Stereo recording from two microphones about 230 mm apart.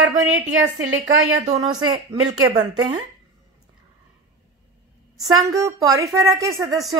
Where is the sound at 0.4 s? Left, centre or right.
Right.